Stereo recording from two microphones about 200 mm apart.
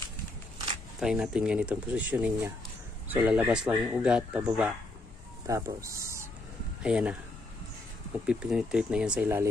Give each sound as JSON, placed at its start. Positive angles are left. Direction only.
{"t": 0.9, "sound": "speech", "side_deg": -5}
{"t": 8.3, "sound": "speech", "side_deg": -5}